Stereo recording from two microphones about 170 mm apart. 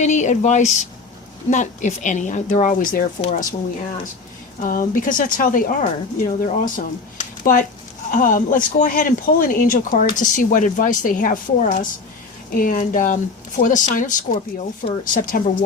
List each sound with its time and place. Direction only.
0.0 s speech: 45° left (ahead or behind)
3.2 s speech: 30° left (ahead or behind)
4.6 s speech: 55° left (ahead or behind)